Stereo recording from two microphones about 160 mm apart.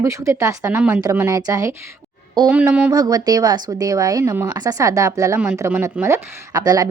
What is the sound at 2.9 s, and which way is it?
Speech, 25° right (ahead or behind).